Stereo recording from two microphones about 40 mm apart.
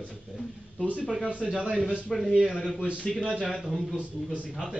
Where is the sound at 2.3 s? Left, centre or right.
Centre.